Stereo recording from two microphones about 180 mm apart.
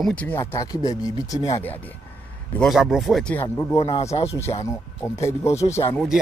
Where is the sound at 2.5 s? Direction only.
Centre (ahead or behind).